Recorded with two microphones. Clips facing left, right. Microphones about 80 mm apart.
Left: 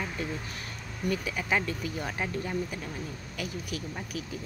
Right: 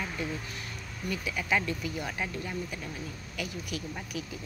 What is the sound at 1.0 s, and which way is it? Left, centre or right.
Speech, left.